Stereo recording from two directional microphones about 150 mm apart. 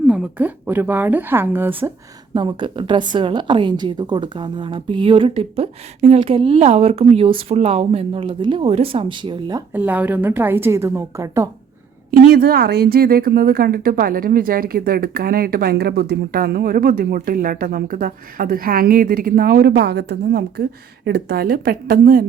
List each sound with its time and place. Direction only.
0.1 s a woman's voice: 10° right (ahead or behind)
2.3 s a woman's voice: 30° right (ahead or behind)
9.7 s a woman's voice: 10° right (ahead or behind)
12.3 s speech: 90° right